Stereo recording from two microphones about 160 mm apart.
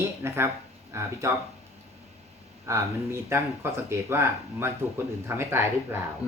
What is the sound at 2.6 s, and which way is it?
Speech, 15° right (ahead or behind).